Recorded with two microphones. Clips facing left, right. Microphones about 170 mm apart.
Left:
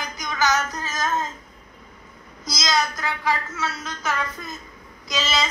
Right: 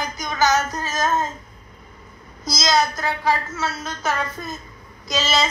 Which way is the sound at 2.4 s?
30° right (ahead or behind).